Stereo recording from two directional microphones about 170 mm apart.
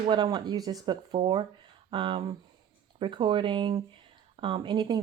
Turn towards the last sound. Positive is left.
turn(degrees=-25)  # may be behind; listen again after turning